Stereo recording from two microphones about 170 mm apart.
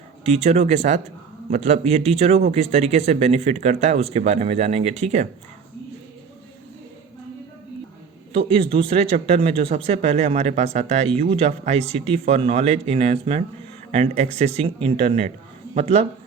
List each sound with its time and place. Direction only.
0.3 s speech: 40° right (ahead or behind)
8.3 s speech: 35° right (ahead or behind)